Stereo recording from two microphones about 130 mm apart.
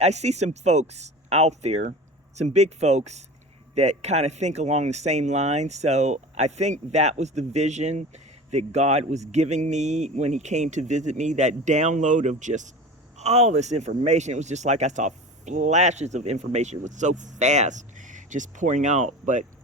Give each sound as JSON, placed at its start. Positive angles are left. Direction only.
{"t": 0.0, "sound": "speech", "side_deg": -60}
{"t": 13.1, "sound": "speech", "side_deg": -55}